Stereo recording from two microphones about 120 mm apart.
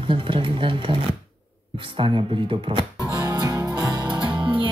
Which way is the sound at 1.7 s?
45° right (ahead or behind).